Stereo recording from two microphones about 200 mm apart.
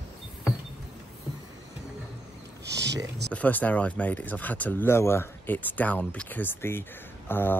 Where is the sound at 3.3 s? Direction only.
10° left (ahead or behind).